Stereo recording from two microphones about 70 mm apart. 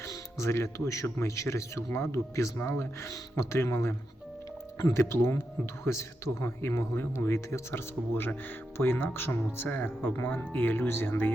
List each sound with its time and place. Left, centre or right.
0.0 s speech: left
4.9 s speech: left